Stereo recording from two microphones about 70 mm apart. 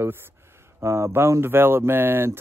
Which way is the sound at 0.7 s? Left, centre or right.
Right.